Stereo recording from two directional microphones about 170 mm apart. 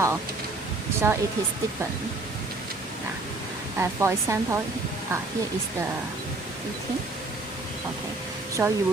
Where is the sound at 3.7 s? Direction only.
15° right (ahead or behind).